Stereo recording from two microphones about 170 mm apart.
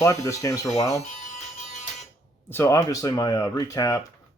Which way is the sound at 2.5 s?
15° left (ahead or behind).